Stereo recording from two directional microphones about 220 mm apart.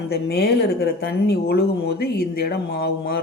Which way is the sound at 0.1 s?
45° left (ahead or behind).